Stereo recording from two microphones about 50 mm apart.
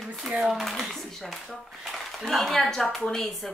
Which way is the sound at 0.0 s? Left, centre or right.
Centre.